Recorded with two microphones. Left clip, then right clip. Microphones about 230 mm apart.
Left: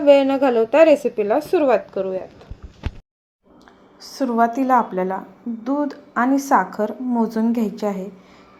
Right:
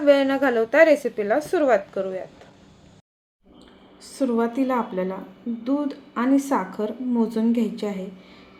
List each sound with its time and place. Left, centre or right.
0.0 s a woman's voice: centre
4.0 s a woman's voice: centre